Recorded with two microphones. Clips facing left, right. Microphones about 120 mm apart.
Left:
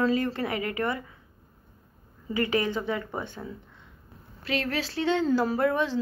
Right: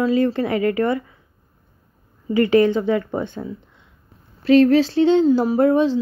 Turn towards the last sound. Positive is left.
turn(degrees=-20)  # may be behind; listen again after turning